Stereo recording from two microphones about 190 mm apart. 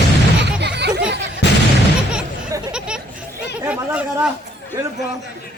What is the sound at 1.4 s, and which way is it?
Artillery fire, 65° left (ahead or behind).